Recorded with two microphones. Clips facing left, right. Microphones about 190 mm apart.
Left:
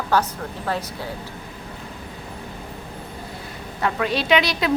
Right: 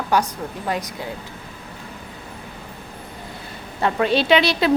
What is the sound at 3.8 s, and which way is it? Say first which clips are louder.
Speech: right 4 dB; 30° right (ahead or behind).